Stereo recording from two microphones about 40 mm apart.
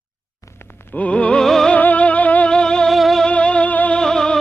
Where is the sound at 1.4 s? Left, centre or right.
Centre.